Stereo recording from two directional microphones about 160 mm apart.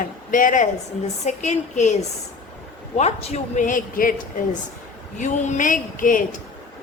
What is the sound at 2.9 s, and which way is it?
A woman's voice, 40° left (ahead or behind).